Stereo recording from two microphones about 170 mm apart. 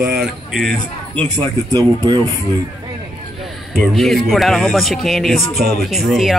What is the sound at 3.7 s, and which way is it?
Speech, 5° left (ahead or behind).